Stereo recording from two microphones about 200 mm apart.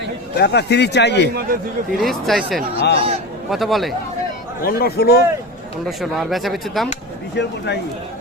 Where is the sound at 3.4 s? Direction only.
Centre (ahead or behind).